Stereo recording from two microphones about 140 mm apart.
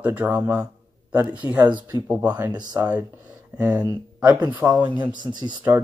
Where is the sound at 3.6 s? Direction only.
25° right (ahead or behind).